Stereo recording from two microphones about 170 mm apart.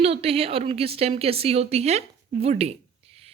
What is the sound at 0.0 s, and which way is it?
A woman's voice, 35° right (ahead or behind).